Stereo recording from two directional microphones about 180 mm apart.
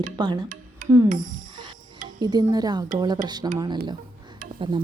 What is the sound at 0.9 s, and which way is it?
A woman's voice, 20° right (ahead or behind).